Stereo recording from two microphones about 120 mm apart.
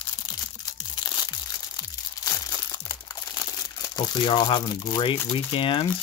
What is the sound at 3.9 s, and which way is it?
Speech, 40° left (ahead or behind).